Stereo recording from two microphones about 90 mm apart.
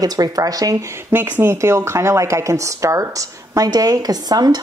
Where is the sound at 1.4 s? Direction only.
30° right (ahead or behind).